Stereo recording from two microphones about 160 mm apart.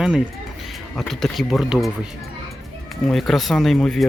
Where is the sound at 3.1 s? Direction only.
Centre (ahead or behind).